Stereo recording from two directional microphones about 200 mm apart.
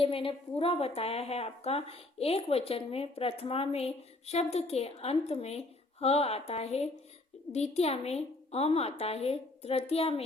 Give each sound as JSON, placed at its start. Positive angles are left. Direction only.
{"t": 0.0, "sound": "speech", "side_deg": 25}